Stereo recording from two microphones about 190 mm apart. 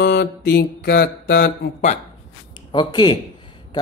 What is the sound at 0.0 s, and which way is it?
Mantra, 65° left (ahead or behind).